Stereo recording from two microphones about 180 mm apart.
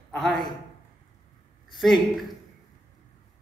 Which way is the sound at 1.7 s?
Centre (ahead or behind).